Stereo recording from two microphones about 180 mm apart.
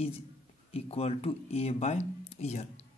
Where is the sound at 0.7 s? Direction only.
35° left (ahead or behind).